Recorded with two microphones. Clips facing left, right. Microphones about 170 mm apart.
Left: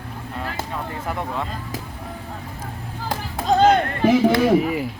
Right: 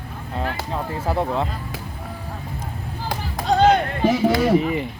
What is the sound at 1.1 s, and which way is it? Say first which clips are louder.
Speech: right 6 dB; 30° right (ahead or behind).